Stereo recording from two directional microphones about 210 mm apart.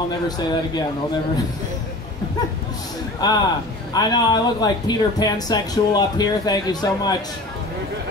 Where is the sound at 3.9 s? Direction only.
20° left (ahead or behind).